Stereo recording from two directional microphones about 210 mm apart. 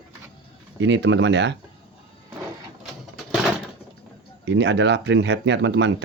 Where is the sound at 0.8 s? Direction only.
60° right (ahead or behind).